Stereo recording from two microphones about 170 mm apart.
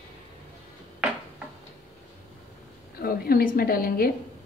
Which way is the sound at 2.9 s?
60° left (ahead or behind).